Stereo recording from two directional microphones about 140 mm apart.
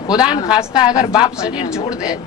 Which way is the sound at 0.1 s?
30° left (ahead or behind).